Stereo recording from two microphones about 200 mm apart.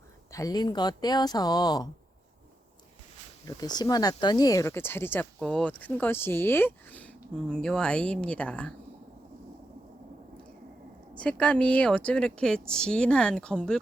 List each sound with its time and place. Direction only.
0.3 s speech: 15° left (ahead or behind)
3.4 s speech: 20° left (ahead or behind)
11.2 s speech: 5° left (ahead or behind)